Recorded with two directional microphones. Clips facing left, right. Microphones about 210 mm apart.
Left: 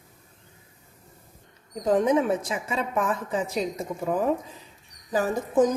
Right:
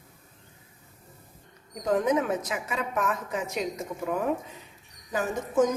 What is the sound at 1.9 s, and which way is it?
A woman's voice, 30° left (ahead or behind).